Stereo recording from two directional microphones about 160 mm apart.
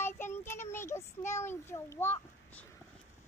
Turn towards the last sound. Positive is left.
turn(degrees=15)  # may be behind; listen again after turning